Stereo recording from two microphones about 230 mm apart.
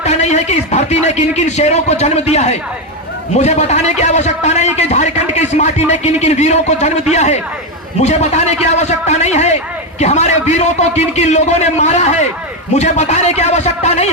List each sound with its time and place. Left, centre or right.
0.0 s a man's voice: left